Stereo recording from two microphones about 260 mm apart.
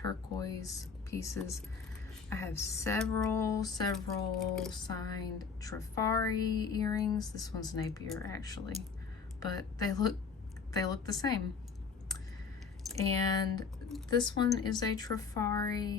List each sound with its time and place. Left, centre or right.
0.0 s a woman's voice: centre
3.9 s speech: centre
4.7 s a woman's voice: centre
12.8 s a sound: centre
13.3 s a woman's voice: centre